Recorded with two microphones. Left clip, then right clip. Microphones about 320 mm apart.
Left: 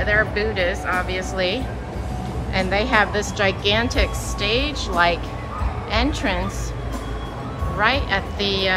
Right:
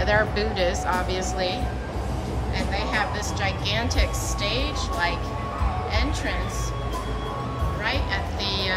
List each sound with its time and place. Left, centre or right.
0.0 s a woman's voice: centre
7.8 s a woman's voice: centre